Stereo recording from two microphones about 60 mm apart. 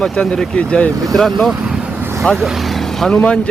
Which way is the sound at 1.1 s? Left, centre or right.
Centre.